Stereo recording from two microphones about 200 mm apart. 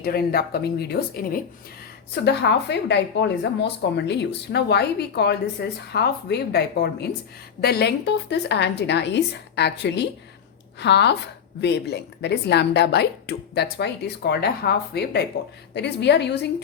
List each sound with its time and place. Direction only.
0.0 s speech: 50° left (ahead or behind)